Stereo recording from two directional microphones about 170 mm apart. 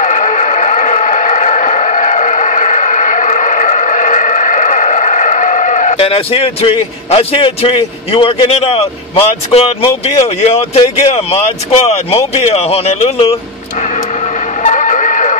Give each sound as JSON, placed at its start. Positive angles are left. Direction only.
{"t": 0.0, "sound": "a sound", "side_deg": 45}
{"t": 5.9, "sound": "a man's voice", "side_deg": 35}
{"t": 14.6, "sound": "vehicle", "side_deg": 45}